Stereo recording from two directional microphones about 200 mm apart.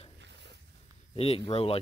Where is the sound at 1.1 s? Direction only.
30° left (ahead or behind).